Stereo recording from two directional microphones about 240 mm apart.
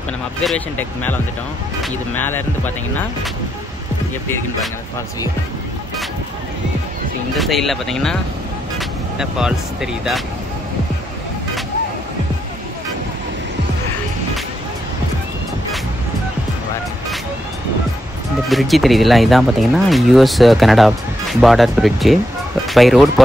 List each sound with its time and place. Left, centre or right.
0.4 s speech: centre
7.3 s speech: centre
18.5 s speech: centre